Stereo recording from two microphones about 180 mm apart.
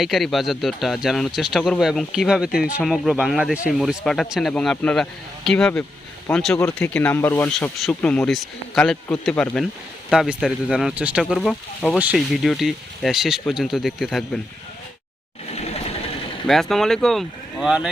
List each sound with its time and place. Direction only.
0.0 s speech: centre (ahead or behind)
15.5 s vehicle: 35° left (ahead or behind)
16.5 s speech: centre (ahead or behind)